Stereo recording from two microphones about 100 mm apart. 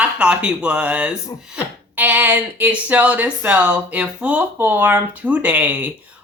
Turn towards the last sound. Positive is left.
turn(degrees=-15)  # may be behind; listen again after turning